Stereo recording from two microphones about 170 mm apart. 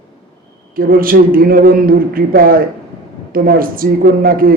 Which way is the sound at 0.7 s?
60° right (ahead or behind).